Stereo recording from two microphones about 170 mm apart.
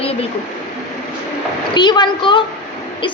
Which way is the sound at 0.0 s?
35° left (ahead or behind).